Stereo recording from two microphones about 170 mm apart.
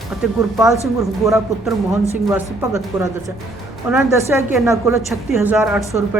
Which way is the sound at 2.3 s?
15° right (ahead or behind).